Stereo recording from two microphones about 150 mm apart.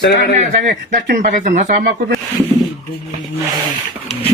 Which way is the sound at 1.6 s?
85° right.